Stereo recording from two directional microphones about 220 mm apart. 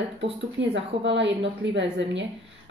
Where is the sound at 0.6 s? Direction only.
55° right (ahead or behind).